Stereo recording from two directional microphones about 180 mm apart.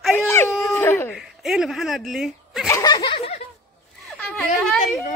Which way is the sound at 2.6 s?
20° left (ahead or behind).